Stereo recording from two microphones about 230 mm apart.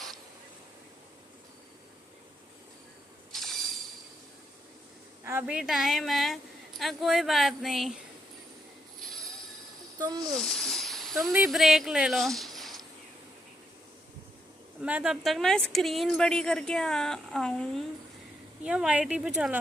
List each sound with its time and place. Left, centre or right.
3.3 s train: centre
5.2 s speech: centre
10.0 s speech: centre
10.3 s speech: centre
14.8 s speech: centre